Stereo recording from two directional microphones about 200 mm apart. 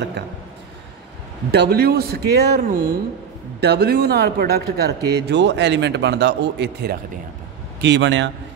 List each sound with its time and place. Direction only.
1.5 s speech: 55° right (ahead or behind)